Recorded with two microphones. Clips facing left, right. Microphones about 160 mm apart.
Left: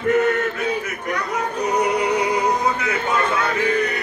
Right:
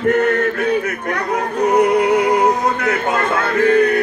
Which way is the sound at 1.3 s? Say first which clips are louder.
Right 7 dB; 55° right (ahead or behind).